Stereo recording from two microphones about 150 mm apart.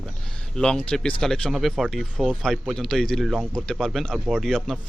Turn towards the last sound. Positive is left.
turn(degrees=0)  # may be behind; listen again after turning